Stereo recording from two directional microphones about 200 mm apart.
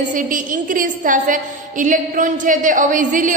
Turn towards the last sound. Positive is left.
turn(degrees=-40)  # may be behind; listen again after turning